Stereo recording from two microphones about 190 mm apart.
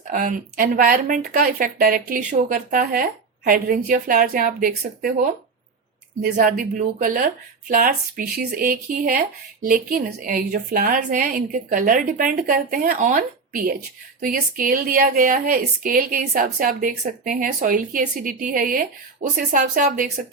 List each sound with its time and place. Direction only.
0.1 s speech: 45° right (ahead or behind)